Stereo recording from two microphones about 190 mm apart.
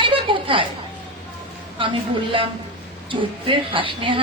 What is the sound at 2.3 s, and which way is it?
A woman's voice, 25° right (ahead or behind).